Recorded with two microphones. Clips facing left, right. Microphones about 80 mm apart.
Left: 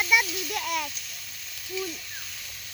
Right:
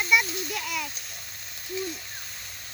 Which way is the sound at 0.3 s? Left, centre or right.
Right.